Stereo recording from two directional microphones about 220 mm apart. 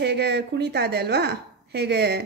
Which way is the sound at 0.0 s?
50° right (ahead or behind).